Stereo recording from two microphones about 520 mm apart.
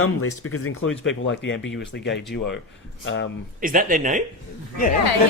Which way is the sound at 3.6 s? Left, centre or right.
Centre.